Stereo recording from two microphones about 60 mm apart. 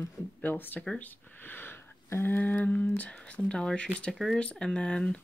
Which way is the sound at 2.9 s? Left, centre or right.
Left.